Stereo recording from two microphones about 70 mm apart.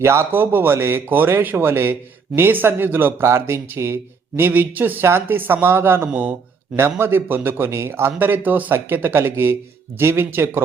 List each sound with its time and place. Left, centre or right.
0.0 s speech: right